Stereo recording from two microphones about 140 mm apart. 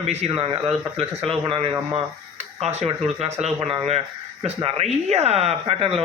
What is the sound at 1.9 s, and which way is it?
Speech, 50° right (ahead or behind).